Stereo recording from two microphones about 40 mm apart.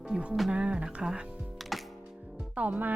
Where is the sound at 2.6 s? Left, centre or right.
Right.